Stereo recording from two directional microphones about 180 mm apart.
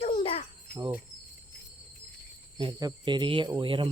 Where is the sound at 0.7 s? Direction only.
55° left (ahead or behind).